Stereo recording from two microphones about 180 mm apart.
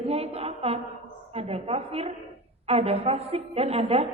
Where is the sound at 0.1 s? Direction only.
35° right (ahead or behind).